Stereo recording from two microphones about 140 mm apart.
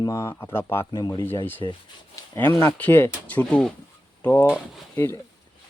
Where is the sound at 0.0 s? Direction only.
20° left (ahead or behind).